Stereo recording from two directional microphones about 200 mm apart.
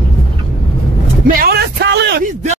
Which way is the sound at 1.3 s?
55° right (ahead or behind).